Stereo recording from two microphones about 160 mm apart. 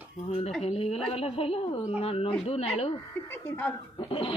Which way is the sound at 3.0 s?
15° left (ahead or behind).